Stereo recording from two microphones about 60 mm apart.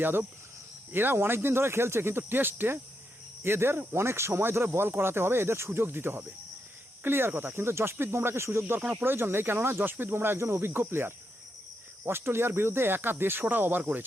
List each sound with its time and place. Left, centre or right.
0.0 s speech: right
8.8 s speech: right
9.0 s speech: right